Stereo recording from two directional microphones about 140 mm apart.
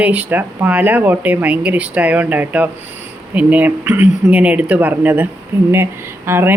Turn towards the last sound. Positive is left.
turn(degrees=-15)  # may be behind; listen again after turning